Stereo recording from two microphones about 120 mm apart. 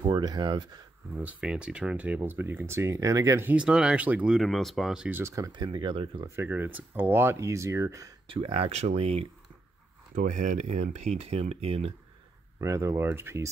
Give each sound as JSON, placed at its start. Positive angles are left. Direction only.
{"t": 0.0, "sound": "speech", "side_deg": -30}
{"t": 1.1, "sound": "speech", "side_deg": -10}
{"t": 3.6, "sound": "speech", "side_deg": -10}
{"t": 5.1, "sound": "speech", "side_deg": -25}
{"t": 5.5, "sound": "speech", "side_deg": -40}
{"t": 6.2, "sound": "speech", "side_deg": -20}
{"t": 8.3, "sound": "speech", "side_deg": -50}
{"t": 10.2, "sound": "speech", "side_deg": -90}
{"t": 12.5, "sound": "speech", "side_deg": -25}